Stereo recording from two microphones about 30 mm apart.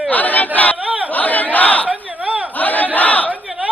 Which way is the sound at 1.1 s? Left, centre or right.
Left.